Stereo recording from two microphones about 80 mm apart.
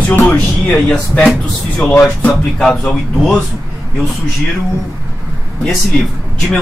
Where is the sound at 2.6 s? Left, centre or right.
Centre.